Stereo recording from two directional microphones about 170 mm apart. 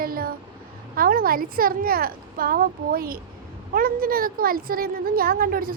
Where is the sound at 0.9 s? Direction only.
60° right (ahead or behind).